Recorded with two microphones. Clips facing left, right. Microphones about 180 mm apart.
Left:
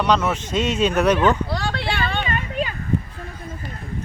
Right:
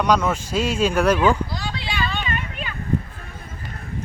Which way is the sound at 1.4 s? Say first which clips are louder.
Left 5 dB; 60° left (ahead or behind).